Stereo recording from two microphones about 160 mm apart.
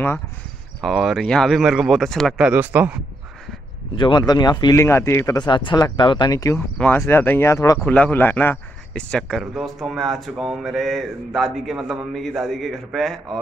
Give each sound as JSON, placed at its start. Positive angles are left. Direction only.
{"t": 0.8, "sound": "speech", "side_deg": 0}
{"t": 2.3, "sound": "speech", "side_deg": -10}
{"t": 3.9, "sound": "speech", "side_deg": 30}
{"t": 7.8, "sound": "speech", "side_deg": 10}